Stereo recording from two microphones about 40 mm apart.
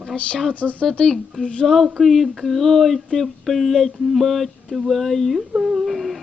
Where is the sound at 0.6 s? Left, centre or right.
Left.